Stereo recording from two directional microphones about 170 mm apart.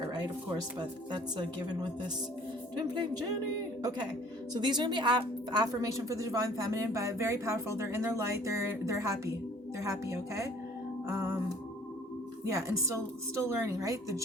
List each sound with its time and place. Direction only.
0.1 s speech: 25° right (ahead or behind)
4.5 s speech: 25° right (ahead or behind)
11.1 s music: 15° right (ahead or behind)
12.5 s speech: 20° right (ahead or behind)